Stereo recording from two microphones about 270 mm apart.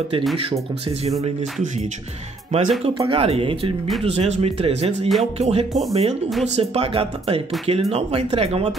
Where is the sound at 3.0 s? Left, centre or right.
Centre.